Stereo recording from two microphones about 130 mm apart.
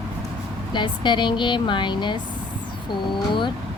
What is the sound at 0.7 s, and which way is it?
Speech, 35° left (ahead or behind).